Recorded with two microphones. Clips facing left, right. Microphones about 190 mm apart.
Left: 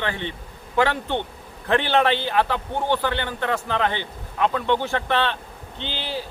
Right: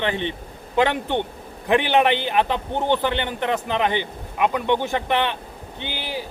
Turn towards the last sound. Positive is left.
turn(degrees=-15)  # may be behind; listen again after turning